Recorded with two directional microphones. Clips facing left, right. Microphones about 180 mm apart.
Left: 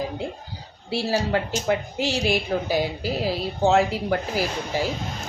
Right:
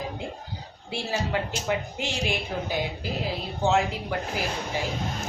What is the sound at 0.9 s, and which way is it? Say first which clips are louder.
A woman's voice: left 6 dB; 35° left (ahead or behind).